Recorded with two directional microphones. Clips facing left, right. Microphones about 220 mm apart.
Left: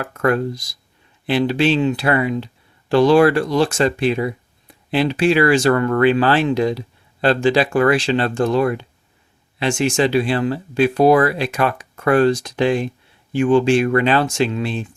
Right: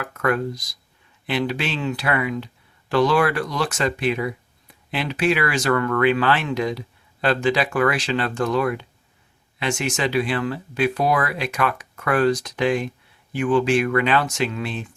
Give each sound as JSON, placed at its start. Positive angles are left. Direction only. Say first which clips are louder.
{"t": 0.0, "sound": "speech", "louder": "left 4 dB", "side_deg": 30}